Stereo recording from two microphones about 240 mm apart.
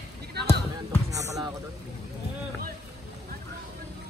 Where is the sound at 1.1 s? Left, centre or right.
Centre.